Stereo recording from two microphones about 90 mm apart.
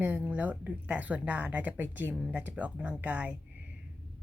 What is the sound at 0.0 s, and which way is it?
Speech, 20° right (ahead or behind).